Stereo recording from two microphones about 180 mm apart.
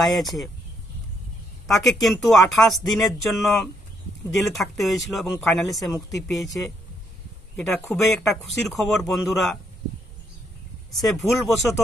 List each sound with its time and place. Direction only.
0.0 s speech: centre (ahead or behind)
1.7 s speech: centre (ahead or behind)
2.2 s speech: 20° left (ahead or behind)
2.9 s speech: centre (ahead or behind)
10.9 s speech: centre (ahead or behind)